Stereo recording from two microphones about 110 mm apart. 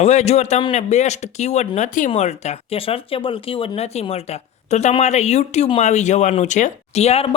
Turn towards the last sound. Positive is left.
turn(degrees=65)  # may be behind; listen again after turning